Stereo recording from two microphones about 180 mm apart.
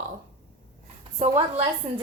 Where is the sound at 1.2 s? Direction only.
35° right (ahead or behind).